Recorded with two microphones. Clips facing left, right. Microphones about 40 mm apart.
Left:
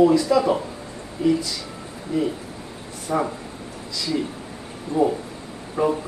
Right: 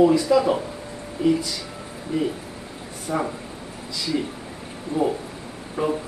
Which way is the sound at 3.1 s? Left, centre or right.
Centre.